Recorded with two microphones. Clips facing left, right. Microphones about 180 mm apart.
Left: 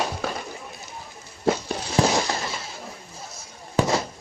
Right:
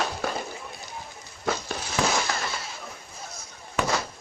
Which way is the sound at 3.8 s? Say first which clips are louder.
Left 4 dB; 30° left (ahead or behind).